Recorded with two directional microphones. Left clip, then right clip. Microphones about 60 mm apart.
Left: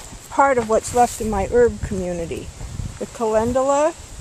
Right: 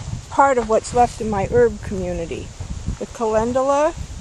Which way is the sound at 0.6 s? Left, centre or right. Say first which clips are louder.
Even; centre.